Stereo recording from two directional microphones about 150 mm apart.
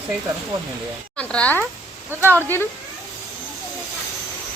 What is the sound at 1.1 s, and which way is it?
Speech, 10° left (ahead or behind).